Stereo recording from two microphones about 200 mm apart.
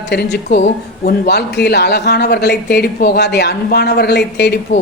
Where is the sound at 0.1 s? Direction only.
55° left (ahead or behind).